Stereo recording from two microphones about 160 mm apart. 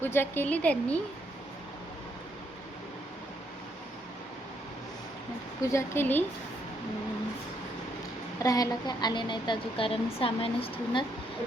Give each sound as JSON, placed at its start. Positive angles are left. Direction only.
{"t": 0.0, "sound": "a woman's voice", "side_deg": 15}
{"t": 5.6, "sound": "a woman's voice", "side_deg": 15}
{"t": 8.4, "sound": "a woman's voice", "side_deg": 20}